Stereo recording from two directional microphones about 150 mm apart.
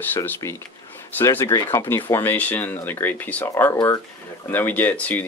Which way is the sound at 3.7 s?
25° left (ahead or behind).